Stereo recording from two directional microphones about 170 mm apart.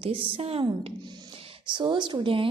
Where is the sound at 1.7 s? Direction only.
30° right (ahead or behind).